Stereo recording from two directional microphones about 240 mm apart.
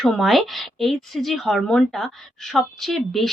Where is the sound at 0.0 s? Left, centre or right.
Centre.